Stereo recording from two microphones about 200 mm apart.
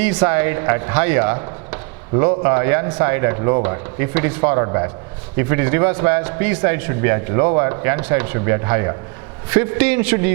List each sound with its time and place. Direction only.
0.0 s a man's voice: 10° right (ahead or behind)